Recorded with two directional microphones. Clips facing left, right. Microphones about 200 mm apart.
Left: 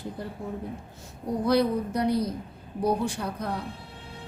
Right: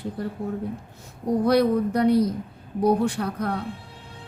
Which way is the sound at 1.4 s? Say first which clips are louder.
Right 3 dB; 60° right (ahead or behind).